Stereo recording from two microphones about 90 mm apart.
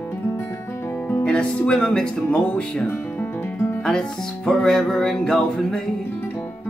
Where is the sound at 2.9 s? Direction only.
20° left (ahead or behind).